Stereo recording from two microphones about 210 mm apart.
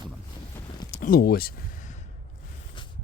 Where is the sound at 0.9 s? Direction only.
40° left (ahead or behind).